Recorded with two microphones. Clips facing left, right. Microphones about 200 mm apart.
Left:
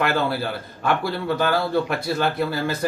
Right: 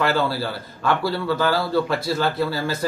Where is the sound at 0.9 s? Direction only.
20° left (ahead or behind).